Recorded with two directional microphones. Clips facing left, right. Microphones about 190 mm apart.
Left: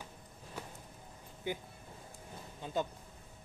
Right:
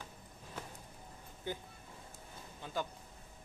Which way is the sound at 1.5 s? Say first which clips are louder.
Left 3 dB; 15° left (ahead or behind).